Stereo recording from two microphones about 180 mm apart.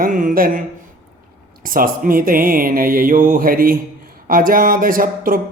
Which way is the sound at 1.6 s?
50° right (ahead or behind).